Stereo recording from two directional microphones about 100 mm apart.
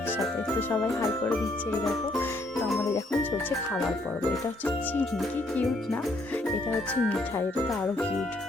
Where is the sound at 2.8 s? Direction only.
30° left (ahead or behind).